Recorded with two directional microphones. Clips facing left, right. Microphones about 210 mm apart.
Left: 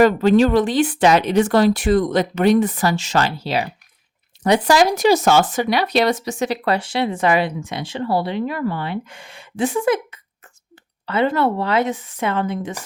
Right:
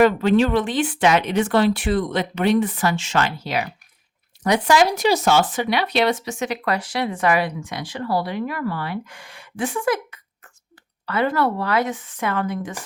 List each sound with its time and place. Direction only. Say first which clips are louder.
0.0 s speech: left 3 dB; 40° left (ahead or behind); by 12.7 s 25° left (ahead or behind)